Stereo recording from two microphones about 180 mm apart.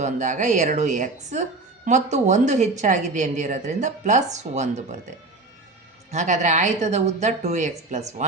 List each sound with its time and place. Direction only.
0.0 s a woman's voice: 40° right (ahead or behind)
6.1 s a woman's voice: 40° right (ahead or behind)